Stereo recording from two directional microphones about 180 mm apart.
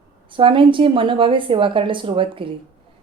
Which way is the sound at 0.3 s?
30° right (ahead or behind).